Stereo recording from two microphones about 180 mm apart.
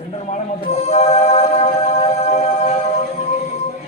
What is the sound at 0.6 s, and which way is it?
Music, 35° left (ahead or behind).